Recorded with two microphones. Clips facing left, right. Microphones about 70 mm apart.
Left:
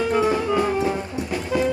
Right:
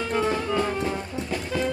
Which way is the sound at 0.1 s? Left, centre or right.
Centre.